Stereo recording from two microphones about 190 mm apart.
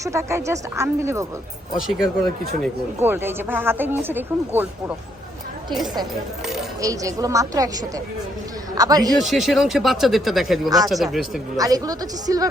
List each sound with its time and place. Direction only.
0.0 s speech: 15° right (ahead or behind)
1.7 s speech: 5° right (ahead or behind)
6.8 s a man's voice: 15° right (ahead or behind)
9.1 s speech: centre (ahead or behind)
11.5 s a woman's voice: 20° right (ahead or behind)